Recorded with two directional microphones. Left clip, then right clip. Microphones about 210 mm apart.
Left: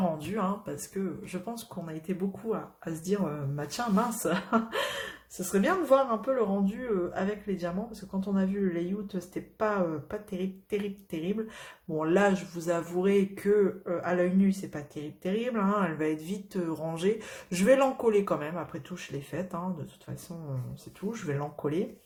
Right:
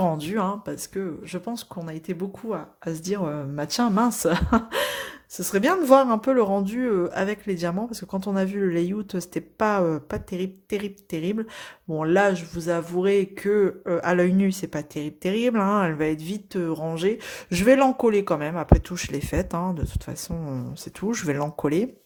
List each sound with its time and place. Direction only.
0.0 s speech: 40° right (ahead or behind)
21.1 s speech: 45° right (ahead or behind)